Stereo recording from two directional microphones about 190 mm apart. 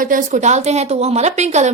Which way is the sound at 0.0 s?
45° right (ahead or behind).